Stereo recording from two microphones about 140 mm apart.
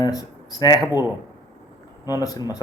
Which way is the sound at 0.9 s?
15° right (ahead or behind).